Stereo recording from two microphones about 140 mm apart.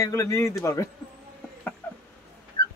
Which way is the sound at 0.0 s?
20° left (ahead or behind).